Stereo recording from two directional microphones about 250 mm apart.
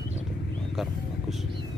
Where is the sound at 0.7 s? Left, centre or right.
Centre.